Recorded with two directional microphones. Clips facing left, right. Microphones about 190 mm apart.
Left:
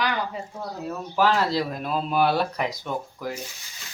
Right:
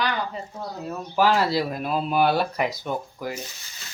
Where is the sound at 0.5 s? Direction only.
5° right (ahead or behind).